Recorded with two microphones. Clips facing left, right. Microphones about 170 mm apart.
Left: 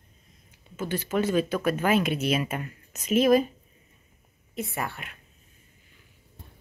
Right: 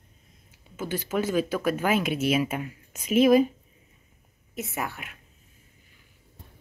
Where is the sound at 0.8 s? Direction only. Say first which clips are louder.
Left 1 dB; 5° right (ahead or behind).